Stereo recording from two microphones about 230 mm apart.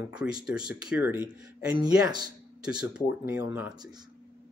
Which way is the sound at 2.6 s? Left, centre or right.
Centre.